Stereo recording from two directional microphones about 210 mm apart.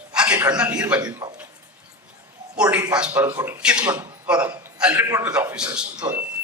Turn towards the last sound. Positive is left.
turn(degrees=-15)  # may be behind; listen again after turning